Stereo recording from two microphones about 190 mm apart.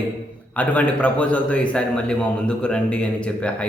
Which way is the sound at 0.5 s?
10° left (ahead or behind).